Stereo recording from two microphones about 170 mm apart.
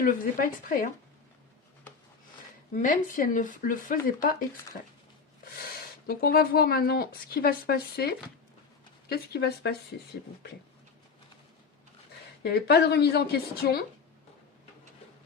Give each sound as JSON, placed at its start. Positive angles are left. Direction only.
{"t": 0.0, "sound": "speech", "side_deg": 55}
{"t": 2.7, "sound": "speech", "side_deg": 50}
{"t": 6.1, "sound": "a woman's voice", "side_deg": 60}
{"t": 12.4, "sound": "a woman's voice", "side_deg": 70}